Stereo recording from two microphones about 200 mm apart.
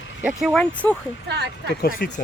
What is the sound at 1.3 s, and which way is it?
Speech, 55° right (ahead or behind).